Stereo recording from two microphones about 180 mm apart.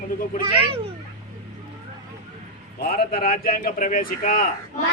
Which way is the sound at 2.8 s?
55° left (ahead or behind).